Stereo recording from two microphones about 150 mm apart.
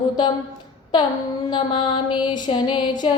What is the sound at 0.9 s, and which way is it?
Music, 30° left (ahead or behind).